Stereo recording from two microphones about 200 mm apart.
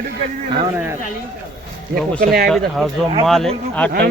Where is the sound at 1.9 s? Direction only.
45° right (ahead or behind).